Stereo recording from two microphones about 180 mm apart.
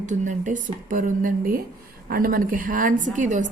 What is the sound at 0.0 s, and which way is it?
A woman's voice, 45° right (ahead or behind).